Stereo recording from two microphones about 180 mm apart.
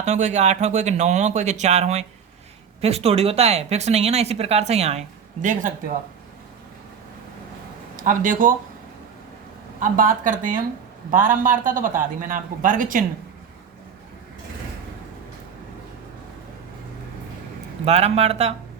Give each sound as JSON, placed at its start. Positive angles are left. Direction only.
{"t": 0.0, "sound": "speech", "side_deg": -40}
{"t": 7.9, "sound": "speech", "side_deg": -45}
{"t": 9.8, "sound": "a man's voice", "side_deg": -50}
{"t": 17.8, "sound": "speech", "side_deg": -35}